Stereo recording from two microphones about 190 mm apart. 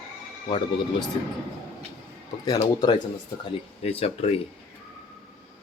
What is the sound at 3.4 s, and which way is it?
Speech, 30° left (ahead or behind).